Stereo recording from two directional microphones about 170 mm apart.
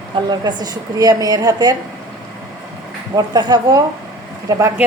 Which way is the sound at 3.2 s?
25° right (ahead or behind).